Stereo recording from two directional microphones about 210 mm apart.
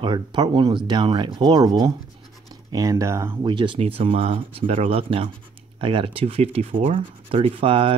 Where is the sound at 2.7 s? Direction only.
15° right (ahead or behind).